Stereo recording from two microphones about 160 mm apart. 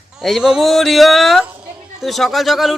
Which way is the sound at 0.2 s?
Centre (ahead or behind).